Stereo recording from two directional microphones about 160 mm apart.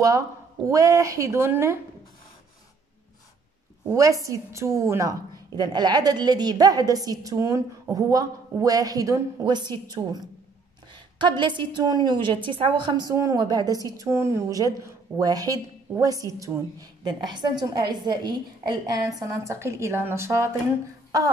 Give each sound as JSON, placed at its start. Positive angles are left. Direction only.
{"t": 0.7, "sound": "a woman's voice", "side_deg": -20}
{"t": 3.9, "sound": "a woman's voice", "side_deg": -20}